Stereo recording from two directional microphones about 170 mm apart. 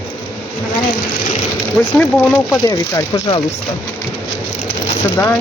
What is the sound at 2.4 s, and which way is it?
Speech, 20° left (ahead or behind).